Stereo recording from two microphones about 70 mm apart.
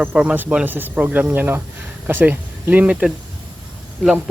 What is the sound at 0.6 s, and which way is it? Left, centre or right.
Speech, right.